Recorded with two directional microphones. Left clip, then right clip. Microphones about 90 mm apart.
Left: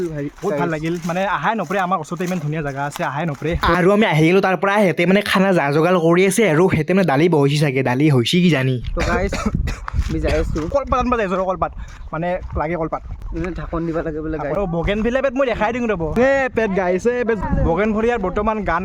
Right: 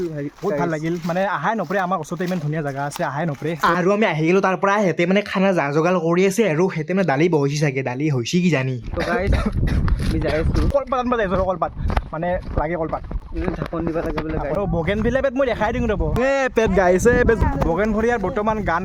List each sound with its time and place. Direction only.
0.6 s speech: centre (ahead or behind)
3.4 s speech: 55° left (ahead or behind)
4.0 s speech: 70° left (ahead or behind)
4.4 s speech: 30° left (ahead or behind)
4.9 s speech: 55° left (ahead or behind)
6.0 s speech: 60° left (ahead or behind); by 6.7 s 80° left
6.7 s speech: 50° left (ahead or behind)
10.6 s speech: 25° left (ahead or behind)
11.1 s speech: 15° left (ahead or behind)
14.5 s speech: centre (ahead or behind)
16.6 s speech: 15° right (ahead or behind)
17.8 s speech: centre (ahead or behind)